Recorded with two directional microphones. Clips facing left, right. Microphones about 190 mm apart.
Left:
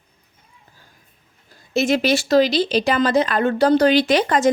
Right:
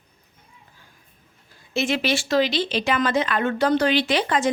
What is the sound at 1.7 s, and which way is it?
Speech, 40° left (ahead or behind).